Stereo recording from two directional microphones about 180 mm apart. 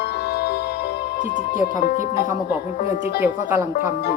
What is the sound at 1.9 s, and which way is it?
Speech, 45° left (ahead or behind).